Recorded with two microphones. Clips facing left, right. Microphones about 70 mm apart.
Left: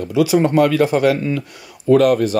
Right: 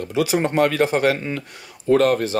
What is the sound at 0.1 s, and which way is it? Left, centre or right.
Speech, right.